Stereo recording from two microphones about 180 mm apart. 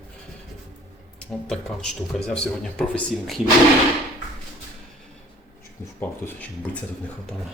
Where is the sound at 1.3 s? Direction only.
5° left (ahead or behind).